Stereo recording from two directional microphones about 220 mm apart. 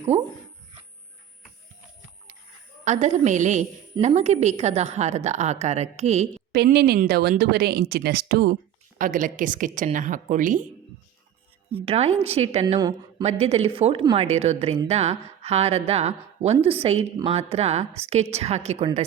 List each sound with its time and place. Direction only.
2.8 s a woman's voice: 30° right (ahead or behind)
6.5 s a woman's voice: 45° right (ahead or behind)
11.7 s a woman's voice: 25° right (ahead or behind)